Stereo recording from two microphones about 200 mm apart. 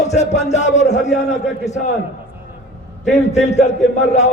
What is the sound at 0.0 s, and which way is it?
A man's voice, 35° left (ahead or behind).